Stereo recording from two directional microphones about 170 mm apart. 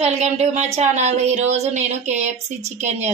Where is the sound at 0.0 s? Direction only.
40° right (ahead or behind).